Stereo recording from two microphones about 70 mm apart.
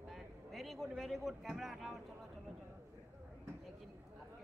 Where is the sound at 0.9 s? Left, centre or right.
Centre.